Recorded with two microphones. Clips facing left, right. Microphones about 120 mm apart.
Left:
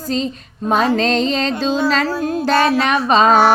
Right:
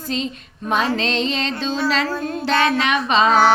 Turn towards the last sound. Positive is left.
turn(degrees=40)  # may be behind; listen again after turning